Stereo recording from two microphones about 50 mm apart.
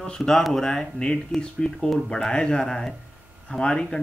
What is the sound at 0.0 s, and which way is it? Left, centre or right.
A man's voice, centre.